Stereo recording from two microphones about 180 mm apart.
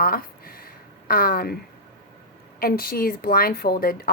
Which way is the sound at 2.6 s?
55° left (ahead or behind).